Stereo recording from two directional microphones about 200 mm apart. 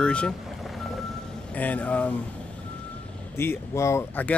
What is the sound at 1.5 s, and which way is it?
Speech, 5° left (ahead or behind).